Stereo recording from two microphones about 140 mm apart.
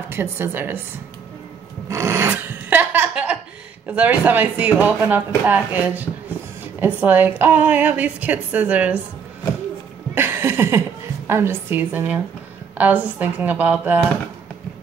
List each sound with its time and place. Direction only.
0.1 s a woman's voice: 15° right (ahead or behind)
1.9 s filing: 20° right (ahead or behind)
3.8 s a woman's voice: 10° right (ahead or behind)
10.1 s a woman's voice: 15° right (ahead or behind)